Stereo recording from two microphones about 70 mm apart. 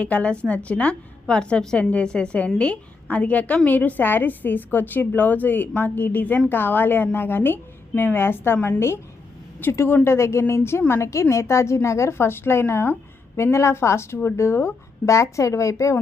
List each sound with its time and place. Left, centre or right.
0.0 s a woman's voice: centre; by 16.0 s left